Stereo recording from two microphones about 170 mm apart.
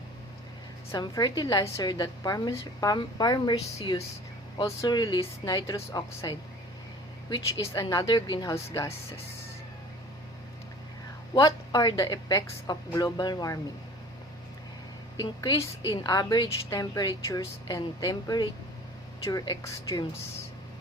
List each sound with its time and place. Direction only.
0.9 s a woman's voice: 20° left (ahead or behind)
11.3 s a woman's voice: 20° left (ahead or behind)
15.2 s a woman's voice: 20° left (ahead or behind)